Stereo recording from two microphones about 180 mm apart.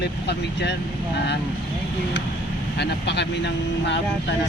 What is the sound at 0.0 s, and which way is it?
Speech, 70° left (ahead or behind).